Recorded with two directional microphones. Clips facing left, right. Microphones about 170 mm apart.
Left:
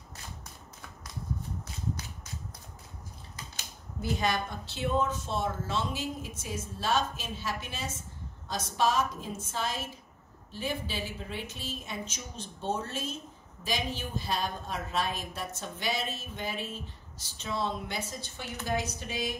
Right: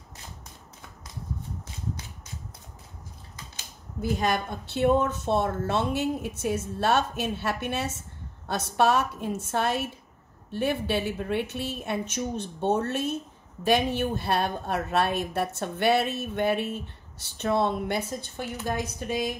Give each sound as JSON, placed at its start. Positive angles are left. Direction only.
{"t": 4.0, "sound": "a woman's voice", "side_deg": -50}